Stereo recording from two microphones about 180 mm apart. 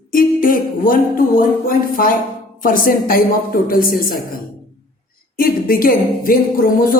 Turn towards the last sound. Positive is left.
turn(degrees=55)  # may be behind; listen again after turning